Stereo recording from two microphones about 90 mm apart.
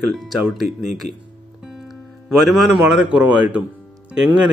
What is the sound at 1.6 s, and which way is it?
Music, 5° right (ahead or behind).